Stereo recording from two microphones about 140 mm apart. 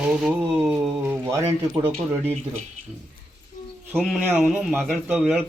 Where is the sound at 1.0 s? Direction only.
15° right (ahead or behind).